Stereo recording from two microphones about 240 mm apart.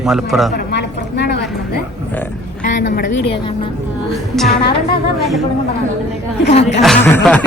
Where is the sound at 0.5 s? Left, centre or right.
Left.